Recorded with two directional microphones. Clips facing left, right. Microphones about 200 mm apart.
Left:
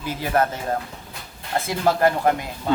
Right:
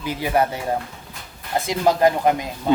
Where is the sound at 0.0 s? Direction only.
15° right (ahead or behind).